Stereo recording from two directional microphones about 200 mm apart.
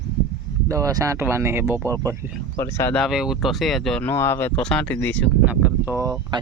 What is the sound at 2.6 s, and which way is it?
Speech, 15° left (ahead or behind).